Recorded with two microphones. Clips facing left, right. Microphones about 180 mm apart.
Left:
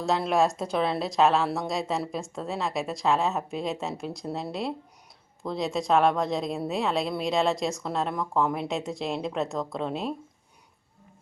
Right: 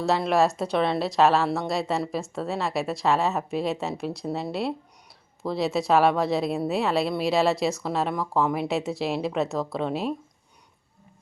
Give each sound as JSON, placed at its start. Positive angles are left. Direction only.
{"t": 0.0, "sound": "speech", "side_deg": 0}